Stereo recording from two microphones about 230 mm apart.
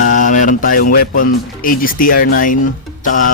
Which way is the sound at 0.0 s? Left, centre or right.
Left.